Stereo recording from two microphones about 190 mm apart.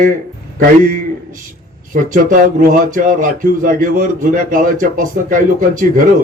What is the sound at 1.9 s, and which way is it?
Speech, 45° right (ahead or behind).